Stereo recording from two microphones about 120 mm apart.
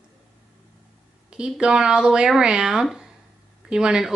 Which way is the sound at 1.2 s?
5° right (ahead or behind).